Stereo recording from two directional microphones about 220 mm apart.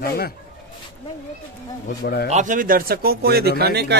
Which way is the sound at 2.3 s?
35° right (ahead or behind).